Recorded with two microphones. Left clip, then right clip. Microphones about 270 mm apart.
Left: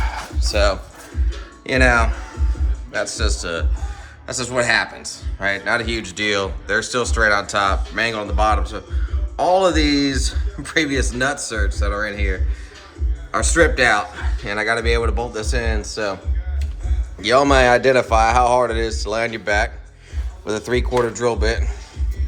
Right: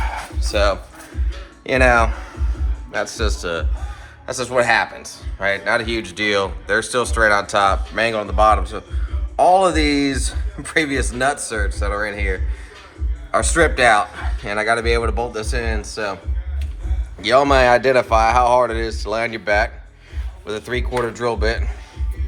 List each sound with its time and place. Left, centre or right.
0.0 s music: centre
1.6 s speech: centre
17.2 s speech: centre
20.4 s speech: left